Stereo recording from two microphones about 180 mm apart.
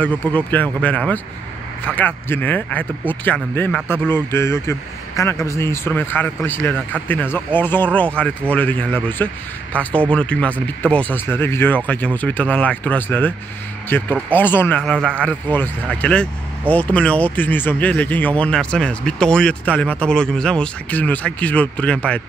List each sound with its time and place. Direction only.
0.0 s speech: 10° left (ahead or behind)